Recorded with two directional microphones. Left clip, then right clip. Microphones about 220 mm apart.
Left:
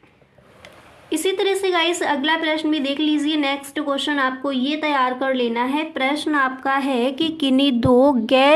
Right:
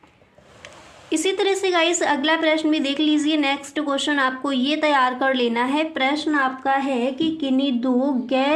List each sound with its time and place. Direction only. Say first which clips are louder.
1.1 s a woman's voice: even; 5° right (ahead or behind)
6.2 s speech: left 1 dB; 15° left (ahead or behind); by 8.5 s 35° left (ahead or behind)